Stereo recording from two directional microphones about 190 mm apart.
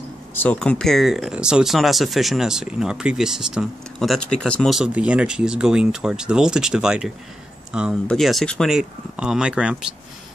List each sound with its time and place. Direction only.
0.3 s speech: 10° left (ahead or behind)